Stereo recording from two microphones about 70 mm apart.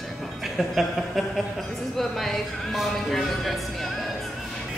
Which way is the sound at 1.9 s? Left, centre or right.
Centre.